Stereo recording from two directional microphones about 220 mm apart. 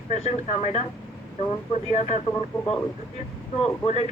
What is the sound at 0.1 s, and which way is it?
Speech, 30° left (ahead or behind).